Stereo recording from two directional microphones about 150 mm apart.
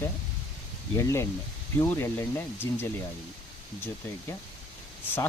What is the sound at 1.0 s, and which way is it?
Speech, 20° left (ahead or behind).